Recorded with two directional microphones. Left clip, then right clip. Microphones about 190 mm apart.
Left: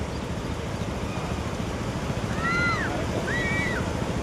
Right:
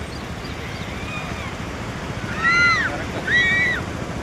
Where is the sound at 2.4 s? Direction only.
20° left (ahead or behind).